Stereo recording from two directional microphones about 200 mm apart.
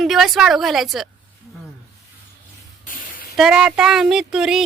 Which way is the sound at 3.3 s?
Centre (ahead or behind).